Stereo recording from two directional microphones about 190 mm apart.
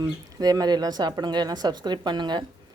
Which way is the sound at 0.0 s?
20° right (ahead or behind).